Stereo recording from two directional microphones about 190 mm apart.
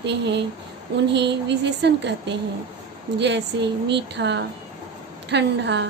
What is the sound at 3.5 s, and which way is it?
A woman's voice, 70° right (ahead or behind).